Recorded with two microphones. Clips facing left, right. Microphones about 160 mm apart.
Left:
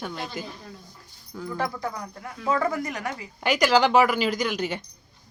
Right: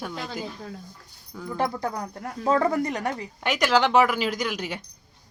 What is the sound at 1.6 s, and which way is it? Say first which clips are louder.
Speech: right 4 dB; 30° right (ahead or behind).